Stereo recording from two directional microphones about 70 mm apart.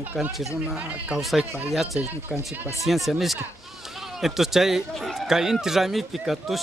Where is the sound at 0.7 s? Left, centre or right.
Centre.